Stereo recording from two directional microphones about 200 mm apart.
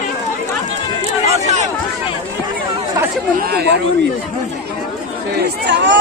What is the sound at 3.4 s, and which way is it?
Speech, 55° right (ahead or behind).